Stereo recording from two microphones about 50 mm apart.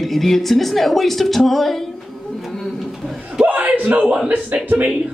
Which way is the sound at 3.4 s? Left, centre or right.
Right.